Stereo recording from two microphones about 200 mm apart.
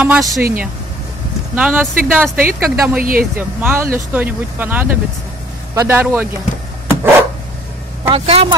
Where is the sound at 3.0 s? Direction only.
45° right (ahead or behind).